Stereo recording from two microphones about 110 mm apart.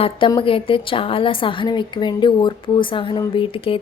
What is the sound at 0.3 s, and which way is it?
A woman's voice, 55° left (ahead or behind).